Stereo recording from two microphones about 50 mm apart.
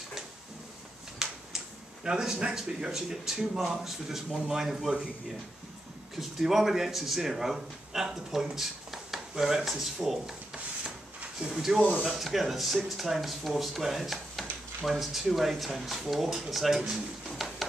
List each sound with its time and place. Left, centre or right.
1.2 s a sound: centre
2.0 s a man's voice: centre
6.1 s speech: centre
10.8 s rub: centre
11.5 s speech: centre
16.9 s a sound: centre